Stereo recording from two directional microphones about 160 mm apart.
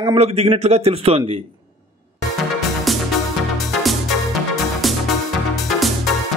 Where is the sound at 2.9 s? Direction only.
Centre (ahead or behind).